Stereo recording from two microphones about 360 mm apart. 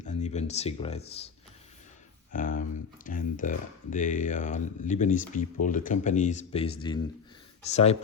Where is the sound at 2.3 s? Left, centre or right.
Left.